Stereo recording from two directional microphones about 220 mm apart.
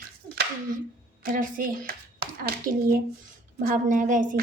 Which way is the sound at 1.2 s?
40° right (ahead or behind).